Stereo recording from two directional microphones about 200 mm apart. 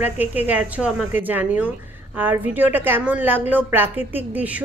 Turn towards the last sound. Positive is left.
turn(degrees=-10)  # may be behind; listen again after turning